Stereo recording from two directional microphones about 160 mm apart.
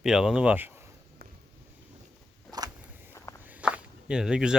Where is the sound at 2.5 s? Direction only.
25° right (ahead or behind).